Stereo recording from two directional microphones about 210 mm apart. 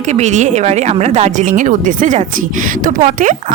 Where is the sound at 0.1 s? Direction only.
35° right (ahead or behind).